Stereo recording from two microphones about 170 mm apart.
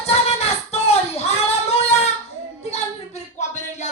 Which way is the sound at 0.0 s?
40° left (ahead or behind).